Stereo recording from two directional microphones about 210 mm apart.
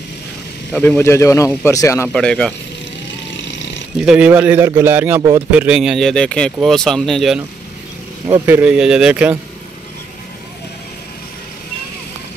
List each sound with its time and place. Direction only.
0.7 s speech: 10° left (ahead or behind)
4.0 s a man's voice: 5° right (ahead or behind)
8.3 s a man's voice: 10° right (ahead or behind)